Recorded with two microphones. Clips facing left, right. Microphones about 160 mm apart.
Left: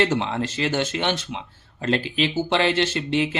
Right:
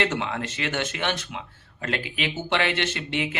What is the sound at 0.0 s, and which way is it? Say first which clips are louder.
Speech: left 4 dB; 30° left (ahead or behind).